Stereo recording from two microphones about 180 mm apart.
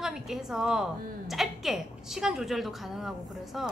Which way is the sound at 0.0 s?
Centre (ahead or behind).